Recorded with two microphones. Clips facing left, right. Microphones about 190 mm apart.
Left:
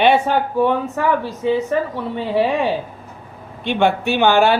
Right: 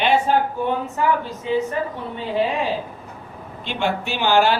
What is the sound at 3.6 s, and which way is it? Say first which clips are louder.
Speech: left 7 dB; 60° left (ahead or behind).